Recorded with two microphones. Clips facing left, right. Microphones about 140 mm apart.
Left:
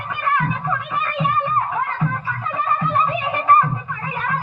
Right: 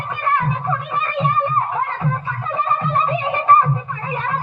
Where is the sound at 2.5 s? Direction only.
25° right (ahead or behind).